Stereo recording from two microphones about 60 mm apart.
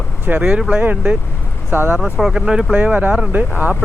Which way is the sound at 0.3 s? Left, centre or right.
Right.